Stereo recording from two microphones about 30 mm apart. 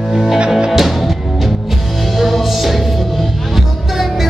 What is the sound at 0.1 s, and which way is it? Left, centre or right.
Music, centre.